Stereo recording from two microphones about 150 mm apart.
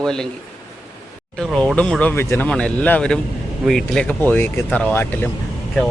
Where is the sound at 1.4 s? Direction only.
5° left (ahead or behind).